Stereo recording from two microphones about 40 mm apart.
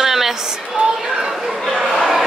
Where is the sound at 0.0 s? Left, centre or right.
Centre.